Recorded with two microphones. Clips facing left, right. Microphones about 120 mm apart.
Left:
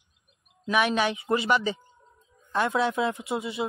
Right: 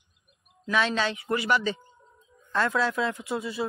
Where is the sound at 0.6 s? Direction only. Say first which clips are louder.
Left 2 dB; 15° left (ahead or behind).